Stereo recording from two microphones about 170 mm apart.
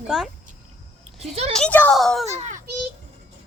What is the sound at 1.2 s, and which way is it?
Speech, 40° right (ahead or behind).